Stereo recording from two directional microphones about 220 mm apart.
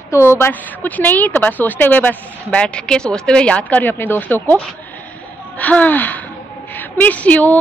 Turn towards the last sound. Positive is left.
turn(degrees=5)  # may be behind; listen again after turning